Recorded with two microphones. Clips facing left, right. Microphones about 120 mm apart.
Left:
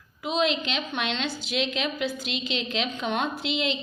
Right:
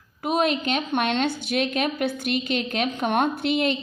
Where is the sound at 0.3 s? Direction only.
50° right (ahead or behind).